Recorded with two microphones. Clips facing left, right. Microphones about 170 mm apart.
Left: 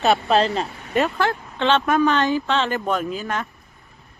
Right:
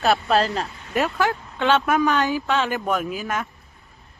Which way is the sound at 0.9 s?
5° right (ahead or behind).